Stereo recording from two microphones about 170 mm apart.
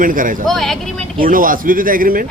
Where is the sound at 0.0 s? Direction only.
55° right (ahead or behind).